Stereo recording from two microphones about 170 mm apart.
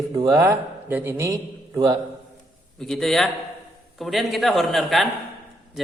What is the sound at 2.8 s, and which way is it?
A man's voice, centre (ahead or behind).